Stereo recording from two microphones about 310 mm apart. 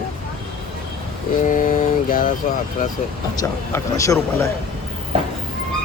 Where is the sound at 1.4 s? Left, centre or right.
Left.